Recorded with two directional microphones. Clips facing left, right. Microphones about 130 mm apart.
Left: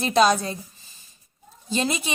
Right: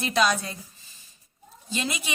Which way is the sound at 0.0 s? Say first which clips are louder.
Left 5 dB; 30° left (ahead or behind).